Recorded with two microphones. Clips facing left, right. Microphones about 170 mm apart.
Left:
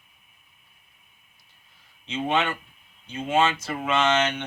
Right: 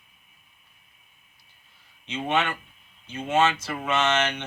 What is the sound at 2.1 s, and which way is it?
Speech, 25° left (ahead or behind).